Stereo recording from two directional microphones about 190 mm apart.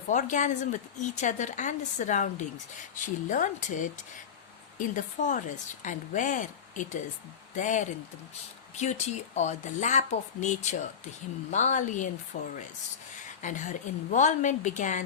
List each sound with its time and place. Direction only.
0.1 s speech: 40° left (ahead or behind)